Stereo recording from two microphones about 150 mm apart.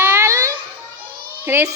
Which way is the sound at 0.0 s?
15° right (ahead or behind).